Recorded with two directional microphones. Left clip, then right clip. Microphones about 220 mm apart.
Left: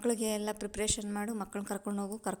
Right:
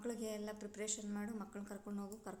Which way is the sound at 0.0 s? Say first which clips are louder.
Left 12 dB; 45° left (ahead or behind).